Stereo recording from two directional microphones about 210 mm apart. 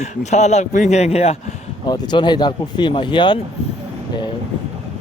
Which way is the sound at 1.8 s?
20° left (ahead or behind).